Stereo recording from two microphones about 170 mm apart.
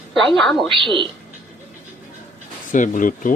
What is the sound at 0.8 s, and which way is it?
Speech, 30° right (ahead or behind).